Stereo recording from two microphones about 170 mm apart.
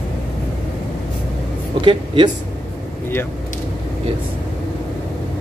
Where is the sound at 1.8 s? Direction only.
30° right (ahead or behind).